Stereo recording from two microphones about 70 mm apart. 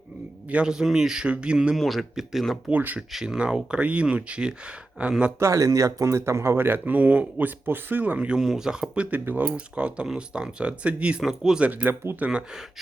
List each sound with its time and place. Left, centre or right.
0.4 s speech: centre
1.7 s speech: centre
2.6 s speech: right
3.1 s speech: centre
5.4 s speech: right; by 9.0 s centre
9.0 s speech: right
9.6 s speech: centre
11.6 s speech: right
12.3 s speech: centre